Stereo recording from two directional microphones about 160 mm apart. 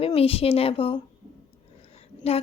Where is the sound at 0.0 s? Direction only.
35° left (ahead or behind).